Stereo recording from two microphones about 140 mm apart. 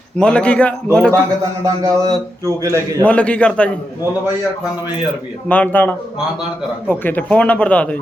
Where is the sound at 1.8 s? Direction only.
25° right (ahead or behind).